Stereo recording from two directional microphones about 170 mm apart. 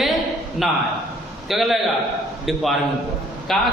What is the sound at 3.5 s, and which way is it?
Speech, centre (ahead or behind).